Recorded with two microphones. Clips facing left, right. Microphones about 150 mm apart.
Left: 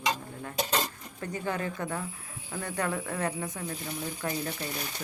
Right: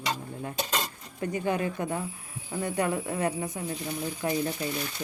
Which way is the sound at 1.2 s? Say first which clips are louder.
Right 4 dB; 15° right (ahead or behind).